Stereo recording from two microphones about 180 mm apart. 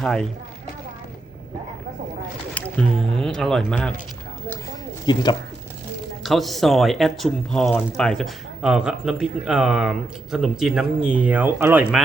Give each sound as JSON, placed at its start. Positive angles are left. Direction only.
{"t": 0.0, "sound": "speech", "side_deg": 5}
{"t": 3.2, "sound": "speech", "side_deg": 0}
{"t": 5.0, "sound": "speech", "side_deg": 25}
{"t": 6.2, "sound": "speech", "side_deg": 0}